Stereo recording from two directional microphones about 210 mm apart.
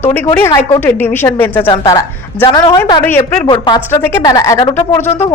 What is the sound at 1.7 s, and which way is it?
A woman's voice, 20° left (ahead or behind).